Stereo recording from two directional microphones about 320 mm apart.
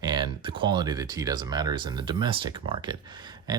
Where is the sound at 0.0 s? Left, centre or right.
Centre.